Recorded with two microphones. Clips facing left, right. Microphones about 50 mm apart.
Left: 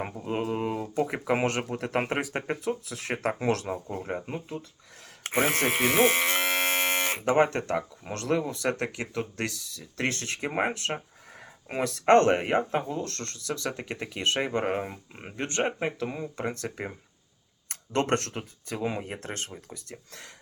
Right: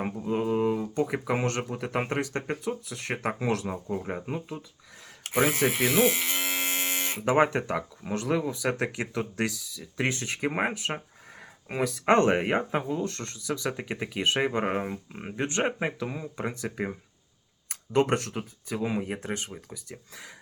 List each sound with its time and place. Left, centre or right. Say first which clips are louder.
0.5 s speech: right 3 dB; centre
5.2 s speech: right 1 dB; left
5.7 s electric shaver: left 1 dB; left
7.3 s speech: right 1 dB; centre